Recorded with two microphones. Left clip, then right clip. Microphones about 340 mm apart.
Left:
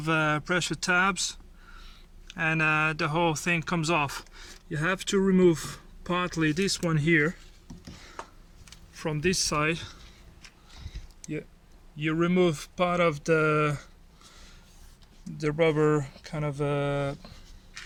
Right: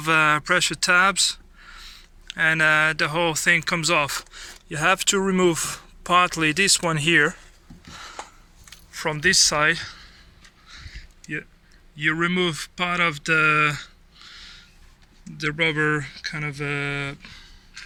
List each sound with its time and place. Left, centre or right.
0.0 s speech: centre
8.9 s a man's voice: centre
11.9 s speech: centre
15.4 s speech: centre